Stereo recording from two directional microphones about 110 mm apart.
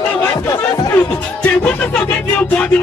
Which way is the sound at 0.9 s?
15° left (ahead or behind).